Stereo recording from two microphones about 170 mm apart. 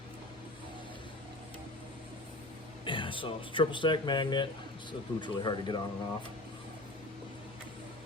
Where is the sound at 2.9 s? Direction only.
30° left (ahead or behind).